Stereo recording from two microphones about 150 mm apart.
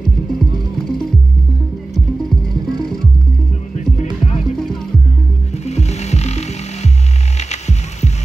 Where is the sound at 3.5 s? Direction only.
55° left (ahead or behind).